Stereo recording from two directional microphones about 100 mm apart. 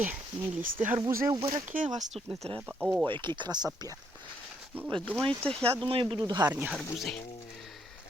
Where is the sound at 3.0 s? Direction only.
55° right (ahead or behind).